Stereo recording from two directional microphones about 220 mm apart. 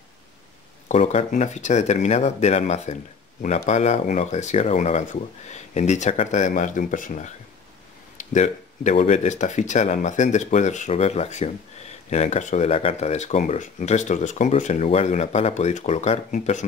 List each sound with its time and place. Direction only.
0.8 s speech: 30° left (ahead or behind)